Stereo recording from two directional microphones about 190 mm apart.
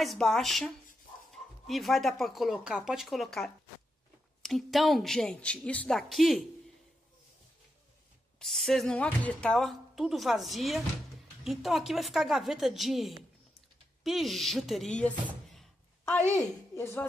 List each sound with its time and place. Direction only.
0.0 s a woman's voice: centre (ahead or behind)
8.4 s a woman's voice: centre (ahead or behind)
15.2 s thunk: centre (ahead or behind)
16.3 s a woman's voice: 15° left (ahead or behind)